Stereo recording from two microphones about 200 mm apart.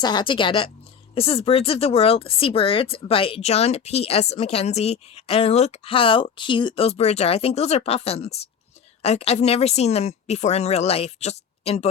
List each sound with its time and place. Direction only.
0.0 s speech: 20° left (ahead or behind)